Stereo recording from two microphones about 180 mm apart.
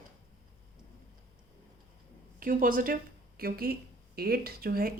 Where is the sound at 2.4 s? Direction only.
50° right (ahead or behind).